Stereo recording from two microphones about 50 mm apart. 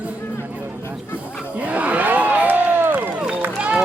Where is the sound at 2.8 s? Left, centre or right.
Right.